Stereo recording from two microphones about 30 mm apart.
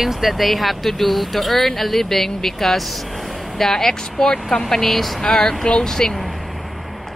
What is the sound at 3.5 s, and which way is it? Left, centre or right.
Speech, centre.